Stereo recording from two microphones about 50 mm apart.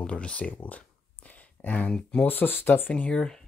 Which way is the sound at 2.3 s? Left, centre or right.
Left.